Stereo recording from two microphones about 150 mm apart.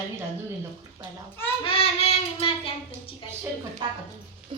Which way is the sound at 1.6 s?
35° left (ahead or behind).